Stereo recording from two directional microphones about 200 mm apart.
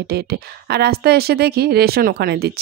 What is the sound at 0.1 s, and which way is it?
Speech, 50° right (ahead or behind).